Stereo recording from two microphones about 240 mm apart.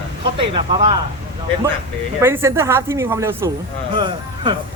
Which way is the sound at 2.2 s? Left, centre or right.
Centre.